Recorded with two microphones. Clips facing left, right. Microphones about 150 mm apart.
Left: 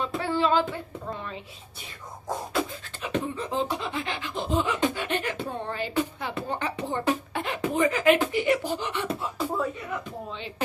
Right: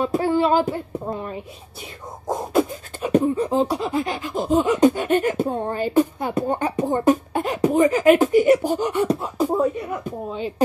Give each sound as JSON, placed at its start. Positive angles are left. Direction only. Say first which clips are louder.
{"t": 0.0, "sound": "speech", "louder": "right 7 dB", "side_deg": -45}
{"t": 2.2, "sound": "beatboxing", "louder": "right 8 dB", "side_deg": -45}